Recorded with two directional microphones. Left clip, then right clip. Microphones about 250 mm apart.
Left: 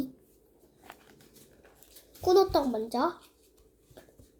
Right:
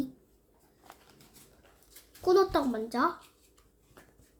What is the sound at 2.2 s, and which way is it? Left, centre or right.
Speech, centre.